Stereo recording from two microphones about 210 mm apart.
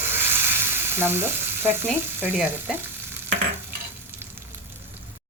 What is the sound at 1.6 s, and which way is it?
A woman's voice, 10° right (ahead or behind).